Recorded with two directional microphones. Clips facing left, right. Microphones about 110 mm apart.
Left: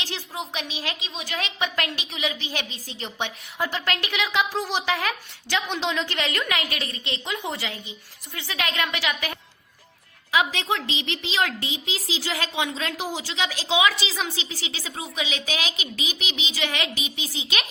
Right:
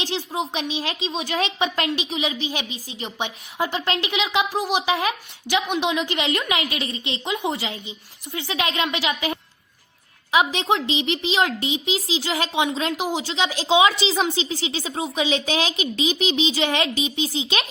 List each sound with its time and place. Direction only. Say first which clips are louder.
0.0 s a woman's voice: right 7 dB; 25° right (ahead or behind)